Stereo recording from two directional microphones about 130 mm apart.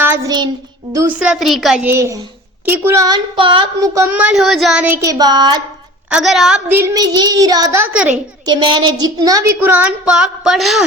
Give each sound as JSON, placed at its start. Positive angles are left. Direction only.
{"t": 0.0, "sound": "child singing", "side_deg": -15}
{"t": 0.3, "sound": "child singing", "side_deg": -35}
{"t": 1.2, "sound": "child singing", "side_deg": -5}
{"t": 1.8, "sound": "speech", "side_deg": -20}
{"t": 3.3, "sound": "a sound", "side_deg": -40}
{"t": 3.8, "sound": "speech", "side_deg": -25}
{"t": 4.2, "sound": "child singing", "side_deg": -5}
{"t": 4.9, "sound": "a sound", "side_deg": -25}
{"t": 6.1, "sound": "child singing", "side_deg": -5}
{"t": 6.7, "sound": "speech", "side_deg": -20}
{"t": 7.9, "sound": "a woman's voice", "side_deg": -10}
{"t": 8.4, "sound": "speech", "side_deg": -35}